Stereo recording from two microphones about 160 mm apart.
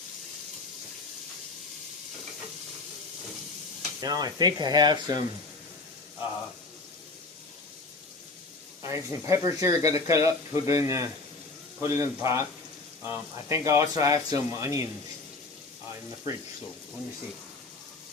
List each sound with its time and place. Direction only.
4.0 s speech: 25° right (ahead or behind)
8.8 s speech: 20° right (ahead or behind)